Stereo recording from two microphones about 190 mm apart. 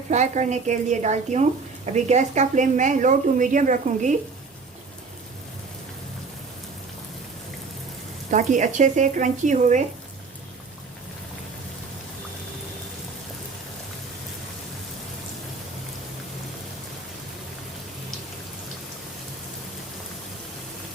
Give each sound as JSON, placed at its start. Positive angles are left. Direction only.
{"t": 0.1, "sound": "a woman's voice", "side_deg": -40}
{"t": 8.3, "sound": "a woman's voice", "side_deg": -40}